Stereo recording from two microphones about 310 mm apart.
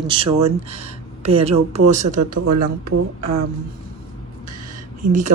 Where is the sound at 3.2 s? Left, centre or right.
Right.